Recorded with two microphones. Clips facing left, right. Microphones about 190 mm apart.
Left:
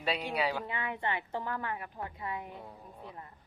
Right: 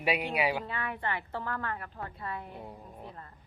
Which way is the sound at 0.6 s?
20° left (ahead or behind).